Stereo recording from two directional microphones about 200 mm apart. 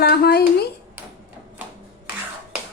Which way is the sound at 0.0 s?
55° left (ahead or behind).